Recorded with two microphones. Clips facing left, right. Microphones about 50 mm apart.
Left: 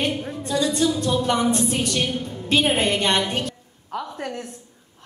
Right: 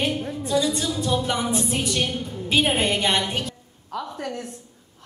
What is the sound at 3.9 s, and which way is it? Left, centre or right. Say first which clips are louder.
Speech: left 1 dB; left.